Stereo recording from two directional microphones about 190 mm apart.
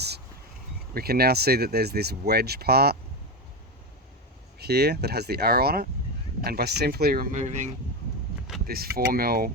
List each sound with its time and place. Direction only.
0.9 s speech: 55° right (ahead or behind)
4.5 s speech: 60° right (ahead or behind); by 7.7 s 40° right (ahead or behind)
8.6 s speech: 50° right (ahead or behind)